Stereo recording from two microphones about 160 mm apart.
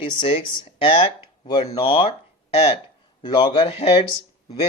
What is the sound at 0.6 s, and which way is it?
Speech, 35° left (ahead or behind).